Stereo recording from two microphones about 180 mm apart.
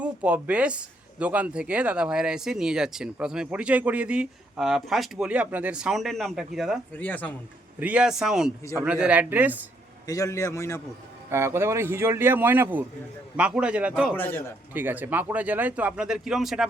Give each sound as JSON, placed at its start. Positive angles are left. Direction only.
{"t": 0.0, "sound": "speech", "side_deg": -5}
{"t": 7.0, "sound": "a man's voice", "side_deg": 10}
{"t": 7.8, "sound": "speech", "side_deg": -5}
{"t": 10.1, "sound": "a man's voice", "side_deg": 20}
{"t": 11.3, "sound": "speech", "side_deg": -15}
{"t": 14.2, "sound": "a man's voice", "side_deg": 10}
{"t": 14.7, "sound": "speech", "side_deg": -10}